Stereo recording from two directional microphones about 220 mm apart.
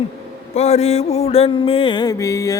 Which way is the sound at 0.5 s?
30° left (ahead or behind).